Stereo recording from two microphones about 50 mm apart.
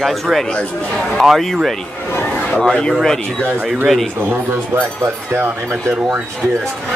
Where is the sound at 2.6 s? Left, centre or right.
Centre.